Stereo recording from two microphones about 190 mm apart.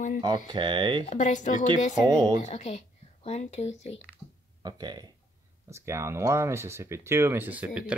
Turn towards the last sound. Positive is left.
turn(degrees=-5)  # may be behind; listen again after turning